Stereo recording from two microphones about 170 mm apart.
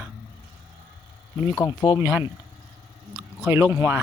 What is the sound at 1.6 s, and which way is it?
Speech, 25° left (ahead or behind).